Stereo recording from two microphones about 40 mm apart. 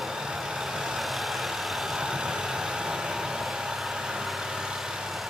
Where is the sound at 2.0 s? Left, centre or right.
Centre.